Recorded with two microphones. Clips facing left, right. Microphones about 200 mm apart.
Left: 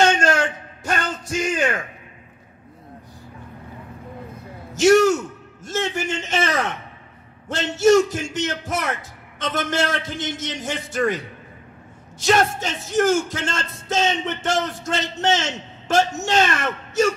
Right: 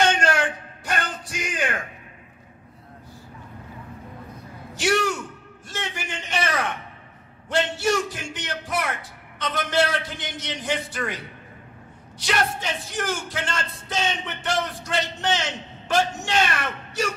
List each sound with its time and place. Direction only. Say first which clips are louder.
0.0 s a sound: left 3 dB; 45° left (ahead or behind)
0.8 s music: left 4 dB; 45° left (ahead or behind)
4.7 s speech: left 9 dB; 45° left (ahead or behind)
12.2 s speech: left 6 dB; 45° left (ahead or behind)